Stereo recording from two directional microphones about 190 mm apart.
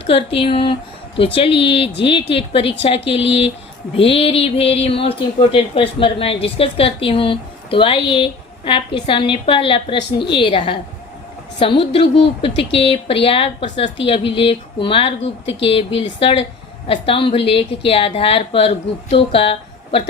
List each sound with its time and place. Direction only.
0.0 s speech: 30° left (ahead or behind)